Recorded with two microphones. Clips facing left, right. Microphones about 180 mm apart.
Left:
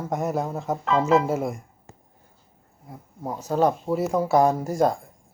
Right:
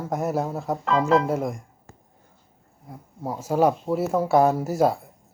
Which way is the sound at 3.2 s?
10° right (ahead or behind).